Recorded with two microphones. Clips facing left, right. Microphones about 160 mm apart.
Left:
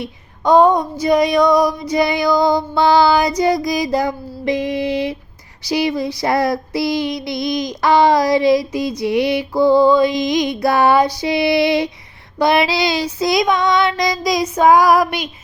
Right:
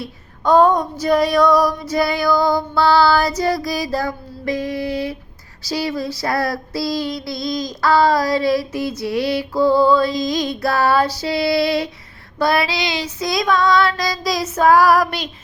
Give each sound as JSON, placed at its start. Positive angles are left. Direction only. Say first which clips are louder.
{"t": 0.0, "sound": "female singing", "louder": "left 2 dB", "side_deg": 15}
{"t": 12.4, "sound": "child singing", "louder": "left 3 dB", "side_deg": 20}
{"t": 12.7, "sound": "child singing", "louder": "left 5 dB", "side_deg": 35}